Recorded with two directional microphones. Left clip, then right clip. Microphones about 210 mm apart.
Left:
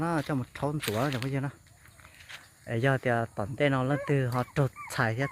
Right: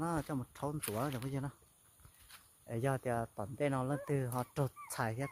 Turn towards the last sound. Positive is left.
turn(degrees=-5)  # may be behind; listen again after turning